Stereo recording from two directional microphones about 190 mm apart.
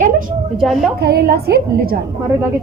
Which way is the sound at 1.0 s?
55° right (ahead or behind).